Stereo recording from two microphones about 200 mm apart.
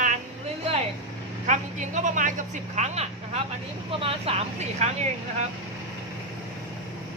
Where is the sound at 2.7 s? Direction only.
35° right (ahead or behind).